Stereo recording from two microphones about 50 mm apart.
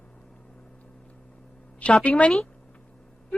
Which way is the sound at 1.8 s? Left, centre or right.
Left.